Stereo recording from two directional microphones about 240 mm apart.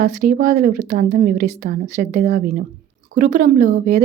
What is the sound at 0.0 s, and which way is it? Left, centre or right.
A woman's voice, right.